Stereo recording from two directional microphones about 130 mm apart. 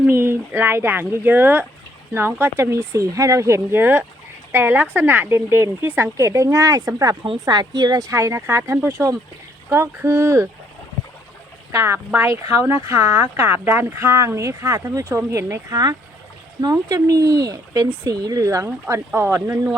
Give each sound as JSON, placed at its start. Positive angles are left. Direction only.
{"t": 0.1, "sound": "speech", "side_deg": -20}
{"t": 11.7, "sound": "speech", "side_deg": -20}